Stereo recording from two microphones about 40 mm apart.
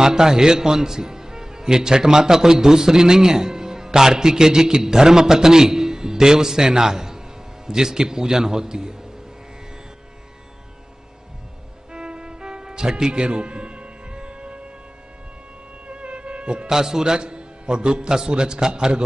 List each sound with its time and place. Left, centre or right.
0.0 s a man's voice: centre
11.9 s music: right
15.9 s insect: right
16.7 s a man's voice: centre